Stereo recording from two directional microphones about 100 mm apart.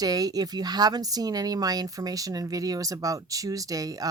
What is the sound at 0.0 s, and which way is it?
Speech, 40° right (ahead or behind).